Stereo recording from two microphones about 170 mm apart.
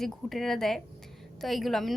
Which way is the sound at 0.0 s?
Centre (ahead or behind).